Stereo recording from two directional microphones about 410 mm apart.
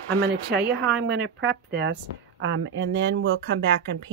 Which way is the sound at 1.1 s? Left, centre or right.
Right.